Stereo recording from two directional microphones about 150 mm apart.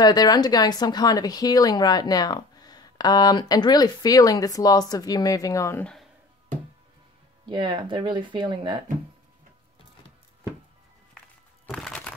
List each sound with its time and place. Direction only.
0.0 s speech: 25° left (ahead or behind)
7.4 s speech: 30° right (ahead or behind)
11.6 s a sound: 5° left (ahead or behind)